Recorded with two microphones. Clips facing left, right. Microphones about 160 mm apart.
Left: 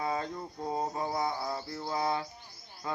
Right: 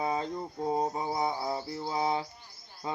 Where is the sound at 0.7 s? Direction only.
15° right (ahead or behind).